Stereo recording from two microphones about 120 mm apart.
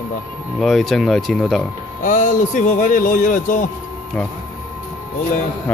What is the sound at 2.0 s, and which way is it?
A man's voice, 90° left.